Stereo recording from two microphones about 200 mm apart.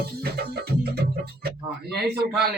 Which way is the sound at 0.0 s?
50° right (ahead or behind).